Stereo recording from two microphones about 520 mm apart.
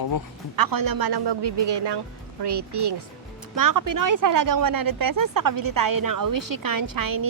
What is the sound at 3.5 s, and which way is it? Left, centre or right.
Speech, right.